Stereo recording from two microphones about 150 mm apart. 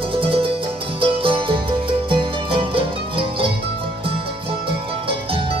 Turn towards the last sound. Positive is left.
turn(degrees=-35)  # may be behind; listen again after turning